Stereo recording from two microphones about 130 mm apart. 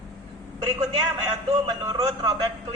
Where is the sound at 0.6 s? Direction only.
30° right (ahead or behind).